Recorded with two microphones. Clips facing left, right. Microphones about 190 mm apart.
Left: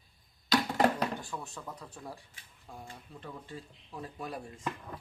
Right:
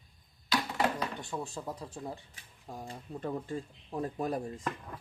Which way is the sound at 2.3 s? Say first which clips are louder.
Right 4 dB; 40° right (ahead or behind).